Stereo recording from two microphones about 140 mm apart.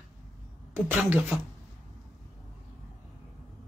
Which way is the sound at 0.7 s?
10° right (ahead or behind).